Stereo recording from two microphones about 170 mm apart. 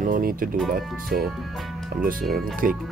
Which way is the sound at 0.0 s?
55° right (ahead or behind).